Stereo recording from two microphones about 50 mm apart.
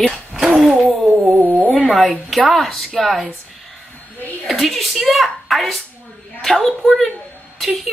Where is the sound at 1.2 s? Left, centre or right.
Right.